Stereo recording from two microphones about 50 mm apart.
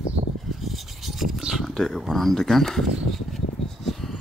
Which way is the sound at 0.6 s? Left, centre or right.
Centre.